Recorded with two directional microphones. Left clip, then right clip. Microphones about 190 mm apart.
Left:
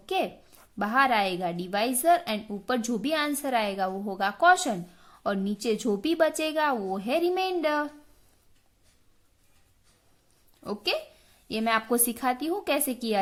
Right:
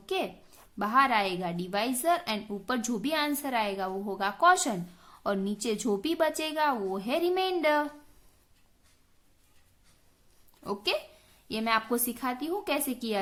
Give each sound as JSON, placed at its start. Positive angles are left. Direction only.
{"t": 0.0, "sound": "a sound", "side_deg": 15}
{"t": 0.8, "sound": "a woman's voice", "side_deg": 15}
{"t": 10.6, "sound": "a woman's voice", "side_deg": 10}